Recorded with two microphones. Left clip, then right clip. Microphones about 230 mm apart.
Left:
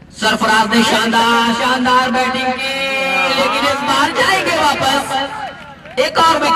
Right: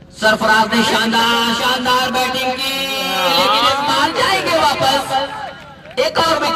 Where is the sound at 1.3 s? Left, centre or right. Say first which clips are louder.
Left 2 dB; right.